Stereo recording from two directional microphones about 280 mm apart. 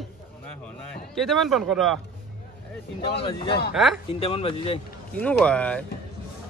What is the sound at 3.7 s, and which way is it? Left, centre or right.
Speech, centre.